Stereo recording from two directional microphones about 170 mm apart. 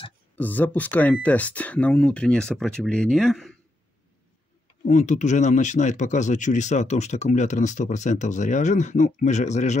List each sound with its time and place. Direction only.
0.4 s speech: 10° left (ahead or behind)
4.8 s speech: 45° left (ahead or behind)